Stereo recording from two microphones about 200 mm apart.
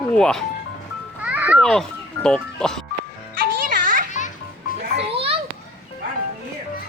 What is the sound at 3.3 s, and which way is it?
Music, 45° right (ahead or behind).